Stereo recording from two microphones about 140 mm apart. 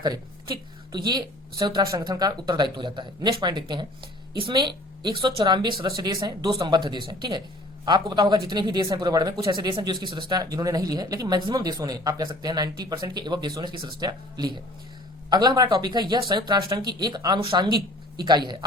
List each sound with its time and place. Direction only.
0.0 s speech: 30° right (ahead or behind)